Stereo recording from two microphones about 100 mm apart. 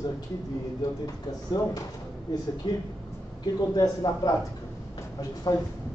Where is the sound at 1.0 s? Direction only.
35° left (ahead or behind).